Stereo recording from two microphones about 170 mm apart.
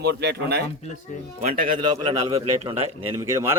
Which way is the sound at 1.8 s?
30° right (ahead or behind).